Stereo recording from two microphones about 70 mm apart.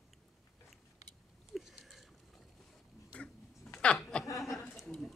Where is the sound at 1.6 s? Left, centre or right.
Centre.